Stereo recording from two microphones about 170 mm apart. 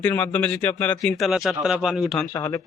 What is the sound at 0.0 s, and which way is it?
Speech, 15° left (ahead or behind).